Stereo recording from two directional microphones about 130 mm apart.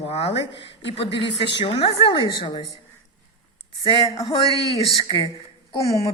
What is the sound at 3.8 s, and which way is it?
A woman's voice, 40° left (ahead or behind).